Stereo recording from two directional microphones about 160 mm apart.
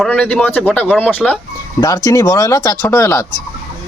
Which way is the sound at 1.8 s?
20° left (ahead or behind).